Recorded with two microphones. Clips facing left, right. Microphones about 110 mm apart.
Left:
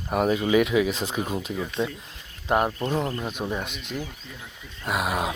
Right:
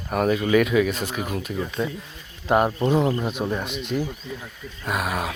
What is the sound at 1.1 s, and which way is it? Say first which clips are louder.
Speech: even; 25° left (ahead or behind).